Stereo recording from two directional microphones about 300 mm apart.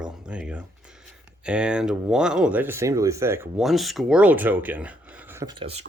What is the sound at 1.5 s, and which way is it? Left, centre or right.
Speech, centre.